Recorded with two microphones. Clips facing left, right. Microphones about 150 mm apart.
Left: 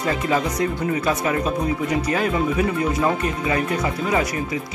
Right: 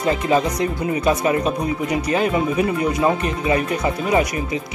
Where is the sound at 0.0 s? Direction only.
20° right (ahead or behind).